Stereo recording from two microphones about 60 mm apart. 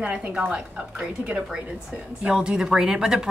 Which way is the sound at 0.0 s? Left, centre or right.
Right.